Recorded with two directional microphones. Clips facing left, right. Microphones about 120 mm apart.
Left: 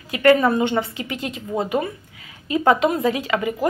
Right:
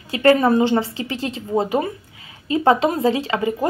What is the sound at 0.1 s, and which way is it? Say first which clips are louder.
A woman's voice: right 1 dB; 30° right (ahead or behind).